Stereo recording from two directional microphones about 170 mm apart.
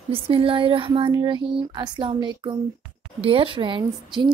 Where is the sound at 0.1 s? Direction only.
30° right (ahead or behind).